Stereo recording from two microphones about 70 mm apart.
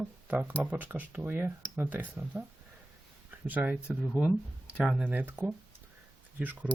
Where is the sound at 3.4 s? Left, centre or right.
Right.